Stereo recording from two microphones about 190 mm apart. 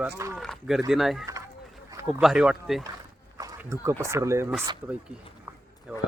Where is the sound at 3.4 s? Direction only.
15° right (ahead or behind).